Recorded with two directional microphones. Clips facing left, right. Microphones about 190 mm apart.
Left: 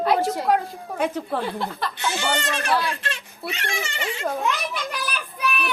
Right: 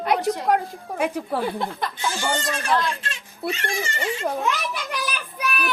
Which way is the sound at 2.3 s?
70° left (ahead or behind).